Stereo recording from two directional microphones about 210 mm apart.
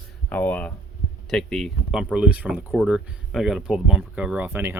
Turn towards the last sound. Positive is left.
turn(degrees=-10)  # may be behind; listen again after turning